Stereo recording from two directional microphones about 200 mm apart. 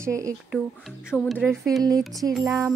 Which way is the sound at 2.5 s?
15° right (ahead or behind).